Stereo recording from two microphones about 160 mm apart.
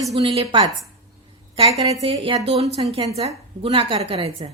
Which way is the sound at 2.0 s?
35° right (ahead or behind).